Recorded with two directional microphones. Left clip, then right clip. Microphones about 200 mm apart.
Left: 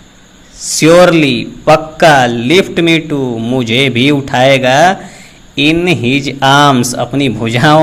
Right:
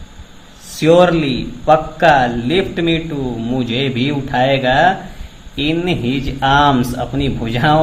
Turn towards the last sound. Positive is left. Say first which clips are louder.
# left 6 dB
turn(degrees=35)  # may be behind; listen again after turning